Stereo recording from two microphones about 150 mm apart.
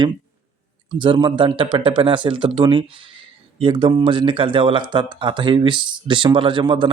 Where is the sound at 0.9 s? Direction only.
35° right (ahead or behind).